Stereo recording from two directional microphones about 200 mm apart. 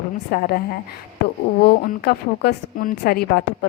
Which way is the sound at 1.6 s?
50° left (ahead or behind).